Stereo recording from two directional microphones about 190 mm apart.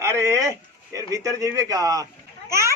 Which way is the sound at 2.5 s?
15° right (ahead or behind).